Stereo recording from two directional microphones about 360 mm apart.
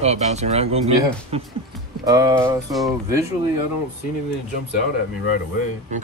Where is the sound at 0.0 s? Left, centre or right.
Centre.